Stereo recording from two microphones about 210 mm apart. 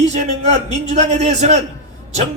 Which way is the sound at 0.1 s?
30° right (ahead or behind).